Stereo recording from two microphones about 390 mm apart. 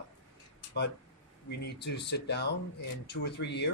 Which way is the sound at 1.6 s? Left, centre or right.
Left.